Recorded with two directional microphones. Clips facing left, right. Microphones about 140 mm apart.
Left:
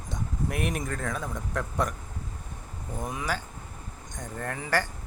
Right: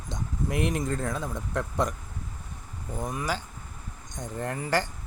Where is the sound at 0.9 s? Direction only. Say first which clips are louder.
Right 2 dB; 15° right (ahead or behind).